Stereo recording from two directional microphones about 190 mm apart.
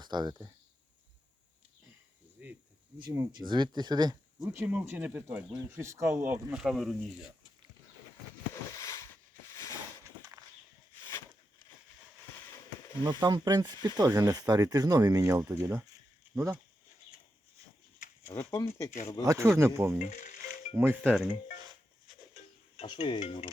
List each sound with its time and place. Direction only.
0.0 s speech: 25° right (ahead or behind)
2.4 s speech: 5° right (ahead or behind)
3.1 s speech: 20° right (ahead or behind)
4.5 s speech: 10° right (ahead or behind)
8.7 s a sound: 15° left (ahead or behind)
13.0 s speech: 20° right (ahead or behind)
18.2 s speech: 15° left (ahead or behind)
19.2 s speech: 15° right (ahead or behind)
20.1 s music: 40° left (ahead or behind)
20.7 s speech: 10° right (ahead or behind)
22.8 s speech: 30° left (ahead or behind)